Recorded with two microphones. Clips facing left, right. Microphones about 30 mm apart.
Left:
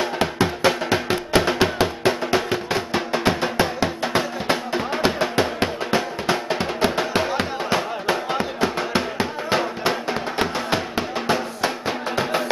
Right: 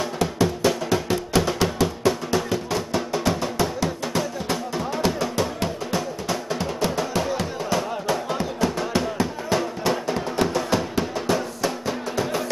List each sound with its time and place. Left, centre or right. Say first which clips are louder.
0.0 s music: left 1 dB; left